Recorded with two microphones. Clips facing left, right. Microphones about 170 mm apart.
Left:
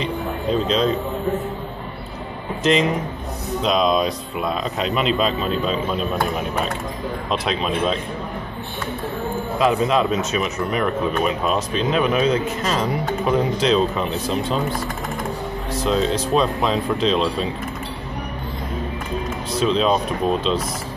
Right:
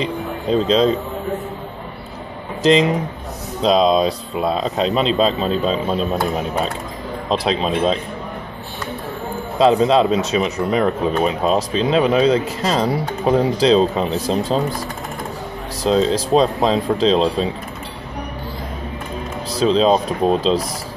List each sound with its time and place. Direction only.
0.0 s speech: 35° right (ahead or behind)
3.6 s speech: 30° right (ahead or behind)
7.2 s speech: 30° right (ahead or behind)
9.6 s speech: 30° right (ahead or behind)
15.8 s speech: 35° right (ahead or behind)
19.5 s speech: 35° right (ahead or behind)